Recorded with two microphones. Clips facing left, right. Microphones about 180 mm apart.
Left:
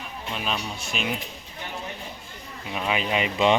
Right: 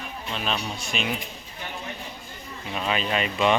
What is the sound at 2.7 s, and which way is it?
Speech, 15° left (ahead or behind).